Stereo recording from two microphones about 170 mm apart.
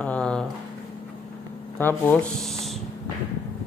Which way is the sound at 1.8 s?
10° left (ahead or behind).